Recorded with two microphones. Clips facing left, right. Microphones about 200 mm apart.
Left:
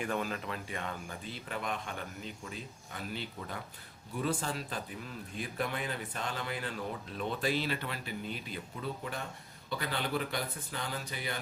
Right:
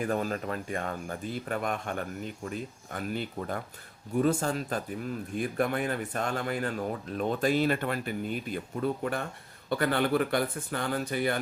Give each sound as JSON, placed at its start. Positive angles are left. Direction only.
{"t": 0.0, "sound": "speech", "side_deg": -40}